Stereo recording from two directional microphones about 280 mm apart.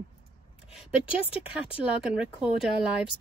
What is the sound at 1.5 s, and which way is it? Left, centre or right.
Speech, centre.